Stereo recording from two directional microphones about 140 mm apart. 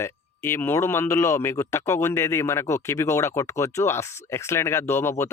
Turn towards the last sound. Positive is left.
turn(degrees=20)  # may be behind; listen again after turning